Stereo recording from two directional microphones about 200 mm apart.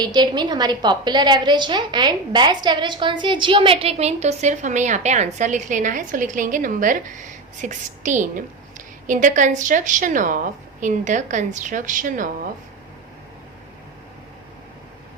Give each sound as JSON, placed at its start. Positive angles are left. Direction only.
{"t": 0.0, "sound": "a woman's voice", "side_deg": -20}